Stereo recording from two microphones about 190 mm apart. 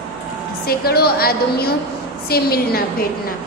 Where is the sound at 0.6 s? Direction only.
55° left (ahead or behind).